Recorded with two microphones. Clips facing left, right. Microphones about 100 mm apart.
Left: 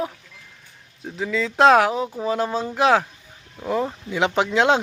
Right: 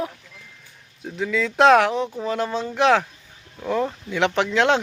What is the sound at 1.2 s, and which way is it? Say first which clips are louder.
Speech: even; centre (ahead or behind).